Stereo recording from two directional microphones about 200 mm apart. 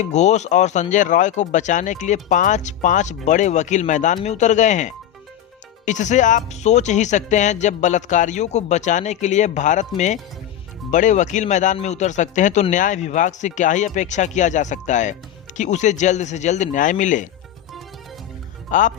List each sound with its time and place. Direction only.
0.0 s speech: 35° left (ahead or behind)
18.7 s speech: 40° left (ahead or behind)